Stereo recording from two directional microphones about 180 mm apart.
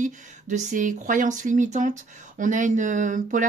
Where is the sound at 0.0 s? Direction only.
45° right (ahead or behind).